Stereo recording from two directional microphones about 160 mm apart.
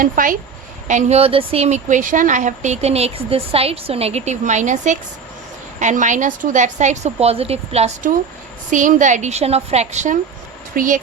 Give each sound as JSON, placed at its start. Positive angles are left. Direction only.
{"t": 0.0, "sound": "speech", "side_deg": -60}
{"t": 0.9, "sound": "speech", "side_deg": -45}